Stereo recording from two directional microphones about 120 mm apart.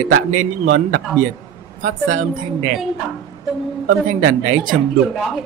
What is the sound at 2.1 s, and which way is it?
Speech, 90° right.